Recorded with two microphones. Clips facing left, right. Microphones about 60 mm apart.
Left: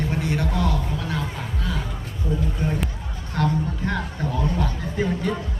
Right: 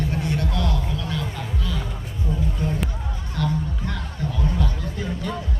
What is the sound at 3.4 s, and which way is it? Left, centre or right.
Music, left.